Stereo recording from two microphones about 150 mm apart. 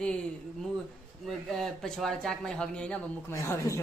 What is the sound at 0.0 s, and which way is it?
Speech, 5° left (ahead or behind).